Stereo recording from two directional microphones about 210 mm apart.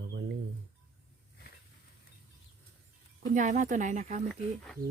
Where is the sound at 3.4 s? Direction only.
35° right (ahead or behind).